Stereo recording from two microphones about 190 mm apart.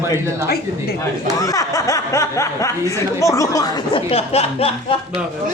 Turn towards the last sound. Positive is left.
turn(degrees=30)  # may be behind; listen again after turning